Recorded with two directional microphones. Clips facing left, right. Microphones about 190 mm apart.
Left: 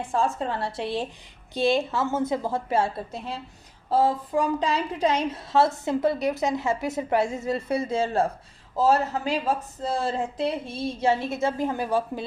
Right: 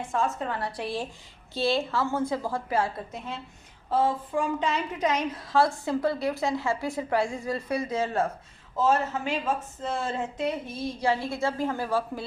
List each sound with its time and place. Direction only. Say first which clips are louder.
0.1 s a woman's voice: left 3 dB; 30° left (ahead or behind)